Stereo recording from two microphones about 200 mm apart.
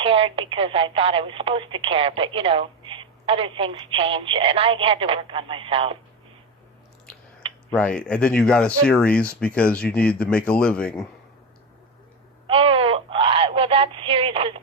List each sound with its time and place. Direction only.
0.0 s speech: 25° right (ahead or behind)
7.7 s speech: 5° left (ahead or behind)
12.5 s speech: 25° right (ahead or behind)